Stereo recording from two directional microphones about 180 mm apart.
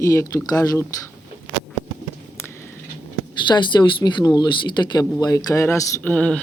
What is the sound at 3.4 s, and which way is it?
Speech, 25° left (ahead or behind).